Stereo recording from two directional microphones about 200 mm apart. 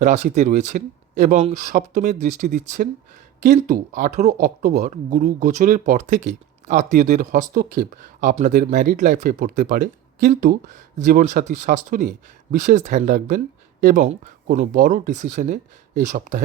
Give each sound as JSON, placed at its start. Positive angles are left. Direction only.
{"t": 0.0, "sound": "speech", "side_deg": -35}